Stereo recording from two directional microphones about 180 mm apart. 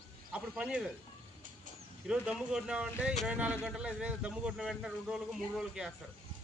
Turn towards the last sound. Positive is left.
turn(degrees=-5)  # may be behind; listen again after turning